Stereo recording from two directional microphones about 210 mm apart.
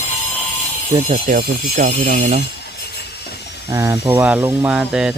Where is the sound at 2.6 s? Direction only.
50° left (ahead or behind).